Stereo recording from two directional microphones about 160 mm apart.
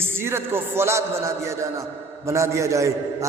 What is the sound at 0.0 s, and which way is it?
A man's voice, 15° right (ahead or behind).